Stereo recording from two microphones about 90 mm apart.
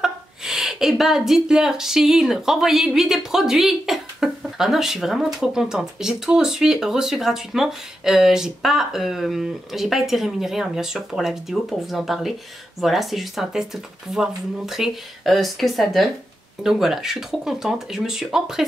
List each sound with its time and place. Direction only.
0.0 s speech: 5° right (ahead or behind)